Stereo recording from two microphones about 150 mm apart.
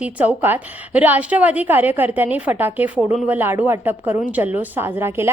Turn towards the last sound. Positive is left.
turn(degrees=-15)  # may be behind; listen again after turning